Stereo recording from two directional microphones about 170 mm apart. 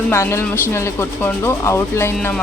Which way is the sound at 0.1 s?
15° left (ahead or behind).